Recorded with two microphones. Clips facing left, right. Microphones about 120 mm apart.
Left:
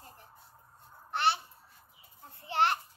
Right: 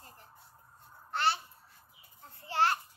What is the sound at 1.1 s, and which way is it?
Babbling, 20° left (ahead or behind).